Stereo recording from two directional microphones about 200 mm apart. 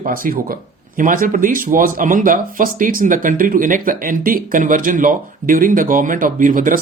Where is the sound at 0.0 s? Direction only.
45° right (ahead or behind).